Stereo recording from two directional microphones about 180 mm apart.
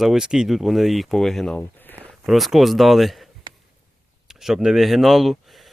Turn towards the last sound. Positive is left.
turn(degrees=0)  # may be behind; listen again after turning